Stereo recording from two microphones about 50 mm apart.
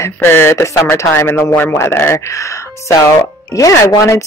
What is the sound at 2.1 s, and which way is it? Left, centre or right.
Speech, left.